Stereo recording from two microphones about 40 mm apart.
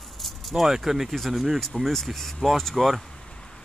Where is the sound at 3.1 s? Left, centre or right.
Left.